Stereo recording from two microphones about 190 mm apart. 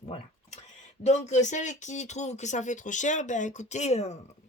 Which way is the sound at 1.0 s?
35° left (ahead or behind).